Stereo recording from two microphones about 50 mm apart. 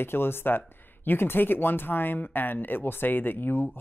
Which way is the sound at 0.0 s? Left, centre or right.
Left.